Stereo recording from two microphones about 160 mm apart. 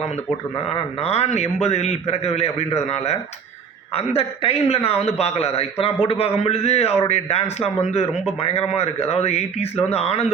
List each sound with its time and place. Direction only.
0.6 s a man's voice: 40° left (ahead or behind)